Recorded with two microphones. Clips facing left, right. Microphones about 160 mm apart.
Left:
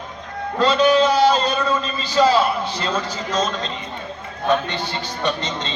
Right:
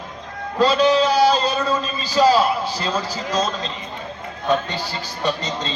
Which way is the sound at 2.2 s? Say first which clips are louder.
Right 1 dB; 35° right (ahead or behind).